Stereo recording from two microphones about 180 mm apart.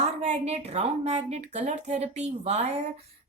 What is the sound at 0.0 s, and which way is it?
A woman's voice, 35° right (ahead or behind).